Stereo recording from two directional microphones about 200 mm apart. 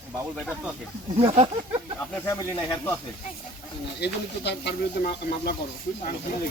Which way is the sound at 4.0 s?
55° left (ahead or behind).